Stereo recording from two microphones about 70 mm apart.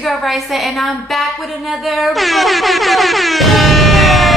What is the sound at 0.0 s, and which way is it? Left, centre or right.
Bell, centre.